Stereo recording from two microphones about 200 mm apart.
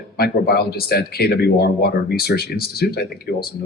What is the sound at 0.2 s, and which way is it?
Speech, 50° left (ahead or behind).